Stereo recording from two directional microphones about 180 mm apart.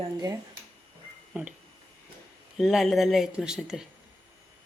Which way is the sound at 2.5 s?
Centre (ahead or behind).